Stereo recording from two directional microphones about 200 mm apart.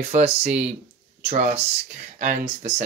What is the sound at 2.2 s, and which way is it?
Speech, 40° right (ahead or behind).